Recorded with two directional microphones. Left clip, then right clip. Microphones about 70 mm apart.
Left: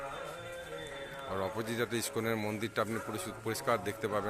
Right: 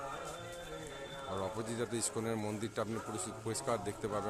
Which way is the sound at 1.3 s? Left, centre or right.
Left.